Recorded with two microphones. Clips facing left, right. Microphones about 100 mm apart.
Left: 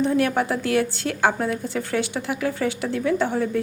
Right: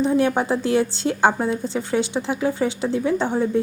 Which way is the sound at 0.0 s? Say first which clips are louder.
Right 2 dB; 20° right (ahead or behind).